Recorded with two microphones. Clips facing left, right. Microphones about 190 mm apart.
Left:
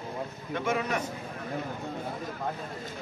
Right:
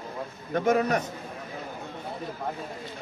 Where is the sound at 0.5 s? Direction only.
40° right (ahead or behind).